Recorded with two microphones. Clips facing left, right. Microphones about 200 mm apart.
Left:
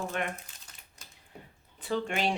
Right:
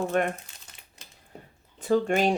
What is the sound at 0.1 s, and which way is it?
Speech, 45° right (ahead or behind).